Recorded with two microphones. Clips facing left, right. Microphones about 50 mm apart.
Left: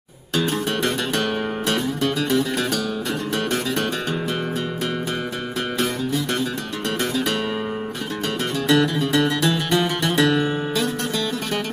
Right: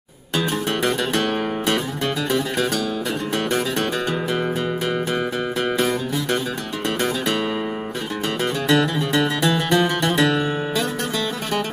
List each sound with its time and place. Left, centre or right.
8.6 s music: centre